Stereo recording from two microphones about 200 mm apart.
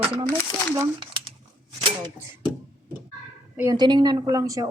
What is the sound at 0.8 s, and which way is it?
Speech, 25° right (ahead or behind).